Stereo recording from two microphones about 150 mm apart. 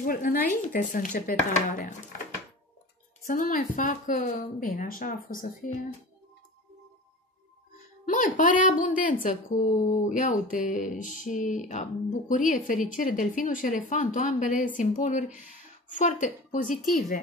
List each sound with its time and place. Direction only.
0.0 s speech: 70° left (ahead or behind)
3.3 s speech: 65° left (ahead or behind)
8.0 s speech: 60° left (ahead or behind)